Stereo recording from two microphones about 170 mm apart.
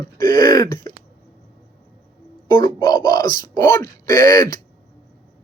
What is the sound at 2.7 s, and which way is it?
Speech, 25° left (ahead or behind).